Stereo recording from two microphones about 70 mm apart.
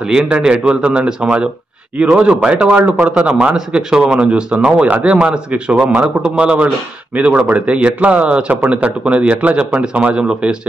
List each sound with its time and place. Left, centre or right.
0.0 s a man's voice: centre